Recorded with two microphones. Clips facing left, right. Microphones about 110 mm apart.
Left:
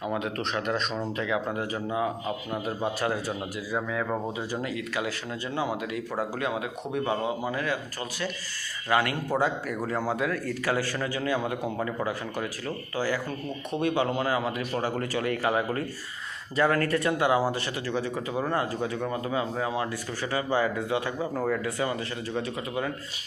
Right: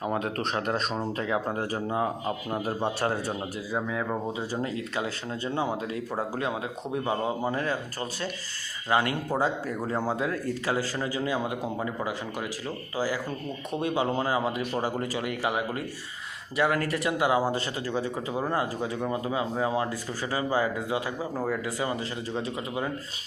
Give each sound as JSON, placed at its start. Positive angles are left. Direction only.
{"t": 0.0, "sound": "speech", "side_deg": -35}
{"t": 8.9, "sound": "speech", "side_deg": -25}
{"t": 21.9, "sound": "speech", "side_deg": -25}